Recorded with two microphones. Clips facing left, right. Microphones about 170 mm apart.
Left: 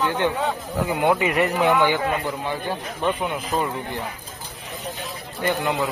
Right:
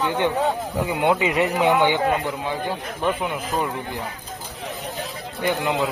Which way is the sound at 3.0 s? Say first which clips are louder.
Even; centre (ahead or behind).